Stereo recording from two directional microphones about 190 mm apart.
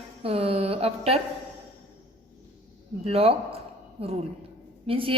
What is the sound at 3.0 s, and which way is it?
Speech, 30° right (ahead or behind).